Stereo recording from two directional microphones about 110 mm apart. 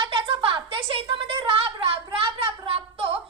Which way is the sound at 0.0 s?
55° right (ahead or behind).